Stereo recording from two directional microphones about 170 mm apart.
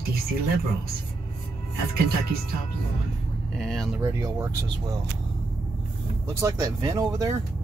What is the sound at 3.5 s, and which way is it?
Speech, 5° left (ahead or behind).